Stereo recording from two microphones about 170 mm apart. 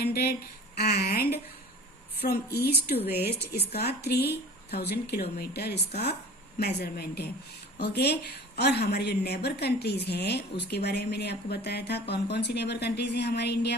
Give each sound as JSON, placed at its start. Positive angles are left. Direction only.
{"t": 0.0, "sound": "a woman's voice", "side_deg": 70}